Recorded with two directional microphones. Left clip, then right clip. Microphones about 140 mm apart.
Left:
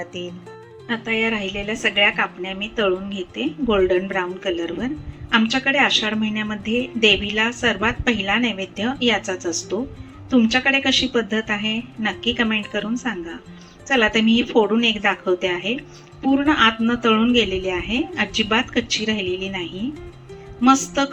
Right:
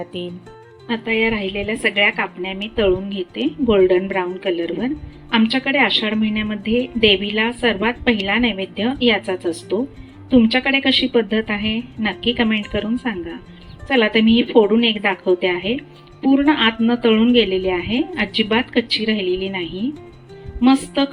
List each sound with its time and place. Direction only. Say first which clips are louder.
0.9 s a woman's voice: right 3 dB; 40° right (ahead or behind)